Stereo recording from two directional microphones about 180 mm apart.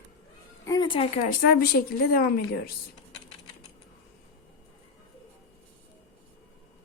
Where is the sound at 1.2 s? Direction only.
55° left (ahead or behind).